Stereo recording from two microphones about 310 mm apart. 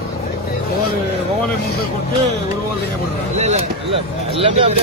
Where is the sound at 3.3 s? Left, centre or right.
Right.